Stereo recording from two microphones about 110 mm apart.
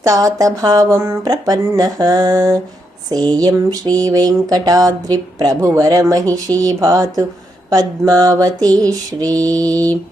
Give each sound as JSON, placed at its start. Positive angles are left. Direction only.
{"t": 0.0, "sound": "speech", "side_deg": -30}